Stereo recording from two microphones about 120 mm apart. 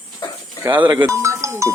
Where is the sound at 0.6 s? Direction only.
15° right (ahead or behind).